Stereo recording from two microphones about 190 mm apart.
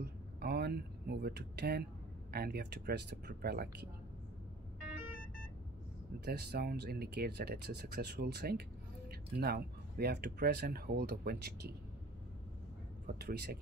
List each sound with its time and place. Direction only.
0.0 s speech: 55° right (ahead or behind)
6.2 s speech: 55° right (ahead or behind)
13.0 s speech: 55° right (ahead or behind)